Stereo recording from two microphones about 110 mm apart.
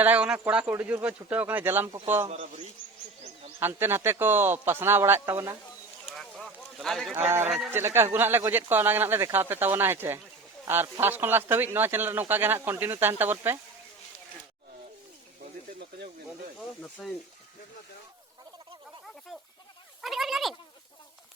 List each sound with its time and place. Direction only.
0.0 s speech: 15° right (ahead or behind)
3.6 s a man's voice: 20° right (ahead or behind)
6.1 s a sound: centre (ahead or behind)
7.1 s a man's voice: 20° right (ahead or behind)
19.3 s snake: 5° right (ahead or behind)
20.0 s a sound: centre (ahead or behind)